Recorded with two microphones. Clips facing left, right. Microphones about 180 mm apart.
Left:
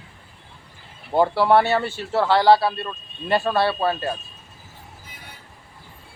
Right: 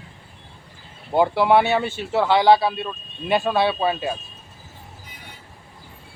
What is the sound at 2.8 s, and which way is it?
Speech, 10° right (ahead or behind).